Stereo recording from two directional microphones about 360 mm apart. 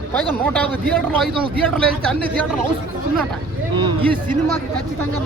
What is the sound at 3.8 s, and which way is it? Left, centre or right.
Speech, centre.